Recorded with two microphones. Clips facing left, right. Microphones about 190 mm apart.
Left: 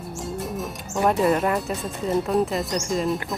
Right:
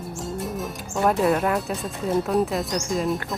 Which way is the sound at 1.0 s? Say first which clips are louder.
Even; centre (ahead or behind).